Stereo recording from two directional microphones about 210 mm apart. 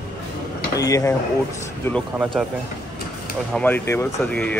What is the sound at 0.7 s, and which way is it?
Speech, 15° left (ahead or behind).